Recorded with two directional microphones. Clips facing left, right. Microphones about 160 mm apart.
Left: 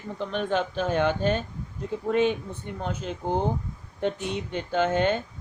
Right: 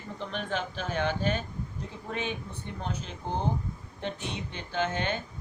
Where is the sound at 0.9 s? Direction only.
50° left (ahead or behind).